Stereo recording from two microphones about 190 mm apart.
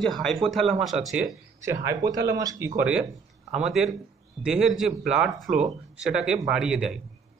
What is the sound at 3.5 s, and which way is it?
A man's voice, centre (ahead or behind).